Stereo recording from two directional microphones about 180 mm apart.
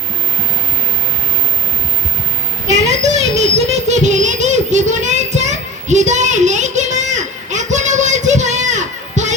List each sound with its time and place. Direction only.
2.6 s child singing: 40° right (ahead or behind)